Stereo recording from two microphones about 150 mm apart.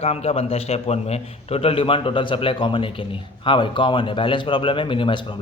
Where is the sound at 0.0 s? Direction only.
40° left (ahead or behind).